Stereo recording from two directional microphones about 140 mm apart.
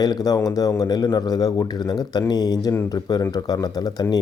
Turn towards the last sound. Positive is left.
turn(degrees=30)  # may be behind; listen again after turning